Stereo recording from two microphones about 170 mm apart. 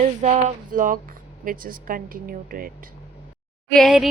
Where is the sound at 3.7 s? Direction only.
Centre (ahead or behind).